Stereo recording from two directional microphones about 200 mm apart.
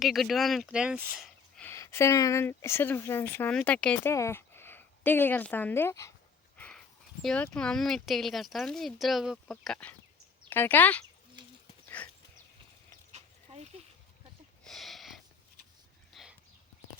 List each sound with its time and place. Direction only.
0.0 s speech: centre (ahead or behind)
1.6 s speech: 15° left (ahead or behind)
6.6 s speech: 5° left (ahead or behind)
12.0 s horse: 5° left (ahead or behind)
13.1 s dog: 30° right (ahead or behind)
14.6 s a sound: centre (ahead or behind)
16.1 s horse: centre (ahead or behind)